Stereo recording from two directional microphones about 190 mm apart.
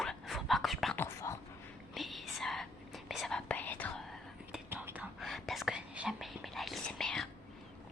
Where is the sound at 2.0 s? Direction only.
Centre (ahead or behind).